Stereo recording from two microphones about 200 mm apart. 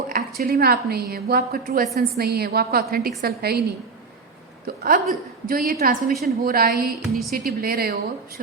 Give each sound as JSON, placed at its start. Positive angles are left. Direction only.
{"t": 0.1, "sound": "a woman's voice", "side_deg": -50}
{"t": 4.8, "sound": "a woman's voice", "side_deg": -45}